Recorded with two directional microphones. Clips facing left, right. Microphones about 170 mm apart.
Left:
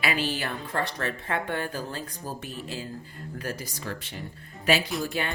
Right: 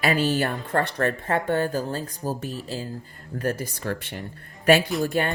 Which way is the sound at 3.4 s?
55° right (ahead or behind).